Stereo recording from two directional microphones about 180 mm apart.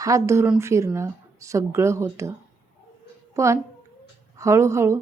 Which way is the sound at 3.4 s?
15° right (ahead or behind).